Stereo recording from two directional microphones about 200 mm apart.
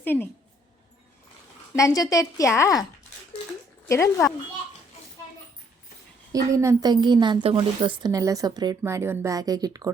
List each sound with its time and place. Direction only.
0.0 s a woman's voice: 10° left (ahead or behind)
1.7 s a woman's voice: 15° left (ahead or behind)
3.8 s a woman's voice: 15° left (ahead or behind)
6.3 s a woman's voice: 15° right (ahead or behind)